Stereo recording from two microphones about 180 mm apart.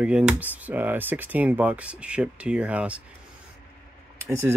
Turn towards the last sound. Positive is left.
turn(degrees=-15)  # may be behind; listen again after turning